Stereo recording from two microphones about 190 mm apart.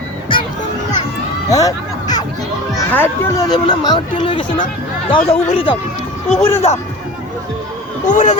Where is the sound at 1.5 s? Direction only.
20° left (ahead or behind).